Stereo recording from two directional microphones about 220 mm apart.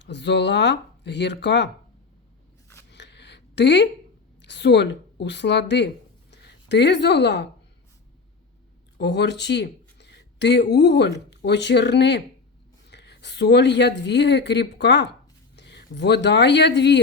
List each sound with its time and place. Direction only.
0.0 s speech: 50° left (ahead or behind)
2.9 s a sound: 50° left (ahead or behind)
4.4 s a woman's voice: 50° left (ahead or behind)
9.0 s speech: 50° left (ahead or behind)